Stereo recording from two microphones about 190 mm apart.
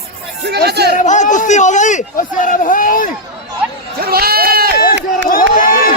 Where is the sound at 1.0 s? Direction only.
40° left (ahead or behind).